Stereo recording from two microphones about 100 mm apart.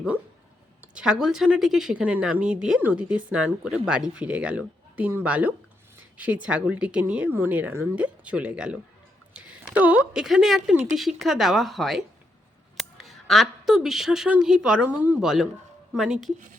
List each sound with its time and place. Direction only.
0.8 s speech: 10° right (ahead or behind)
12.7 s a sound: centre (ahead or behind)
14.3 s speech: 5° right (ahead or behind)